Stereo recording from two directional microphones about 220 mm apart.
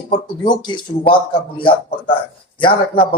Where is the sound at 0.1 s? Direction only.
20° left (ahead or behind).